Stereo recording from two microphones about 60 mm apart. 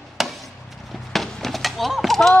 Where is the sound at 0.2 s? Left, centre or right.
Centre.